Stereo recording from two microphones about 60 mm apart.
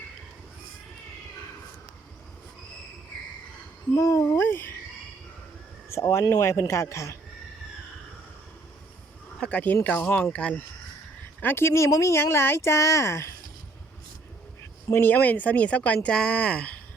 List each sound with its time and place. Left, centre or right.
3.9 s a sound: left
5.9 s speech: left
9.4 s speech: left
11.4 s speech: left
11.9 s speech: left
12.1 s speech: left
14.9 s speech: left